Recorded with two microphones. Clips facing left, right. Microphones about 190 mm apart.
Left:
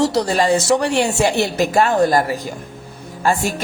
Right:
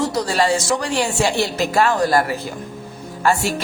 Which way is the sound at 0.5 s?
65° left (ahead or behind).